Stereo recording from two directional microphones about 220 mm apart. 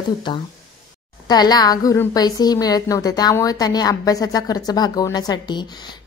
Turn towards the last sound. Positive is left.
turn(degrees=20)  # may be behind; listen again after turning